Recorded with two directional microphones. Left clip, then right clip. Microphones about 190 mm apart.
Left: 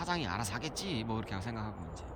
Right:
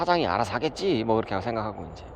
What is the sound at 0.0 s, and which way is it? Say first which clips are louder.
Speech: right 13 dB; 15° right (ahead or behind).